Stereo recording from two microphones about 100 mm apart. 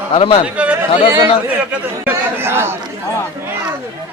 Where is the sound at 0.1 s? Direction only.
70° left (ahead or behind).